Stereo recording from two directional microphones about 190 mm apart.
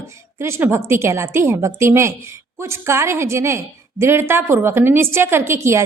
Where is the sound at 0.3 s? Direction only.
15° right (ahead or behind).